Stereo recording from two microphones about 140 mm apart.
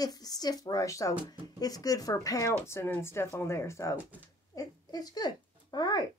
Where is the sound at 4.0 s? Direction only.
10° right (ahead or behind).